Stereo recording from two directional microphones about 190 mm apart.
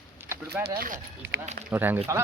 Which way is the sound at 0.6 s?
50° right (ahead or behind).